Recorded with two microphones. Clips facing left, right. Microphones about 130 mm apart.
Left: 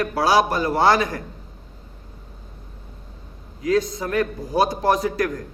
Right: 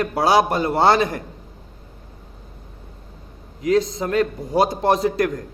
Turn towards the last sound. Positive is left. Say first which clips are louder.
# right 2 dB
turn(degrees=-25)  # may be behind; listen again after turning